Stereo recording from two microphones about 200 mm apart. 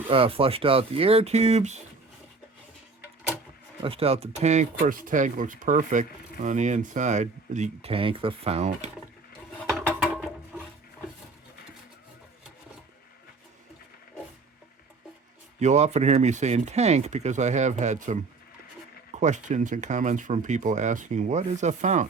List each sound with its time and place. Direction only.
0.1 s speech: 25° right (ahead or behind)
3.8 s speech: 30° right (ahead or behind)
9.8 s a sound: 10° right (ahead or behind)
15.6 s speech: 35° right (ahead or behind)